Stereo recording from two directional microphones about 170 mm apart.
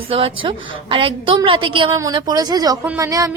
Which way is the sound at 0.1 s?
30° right (ahead or behind).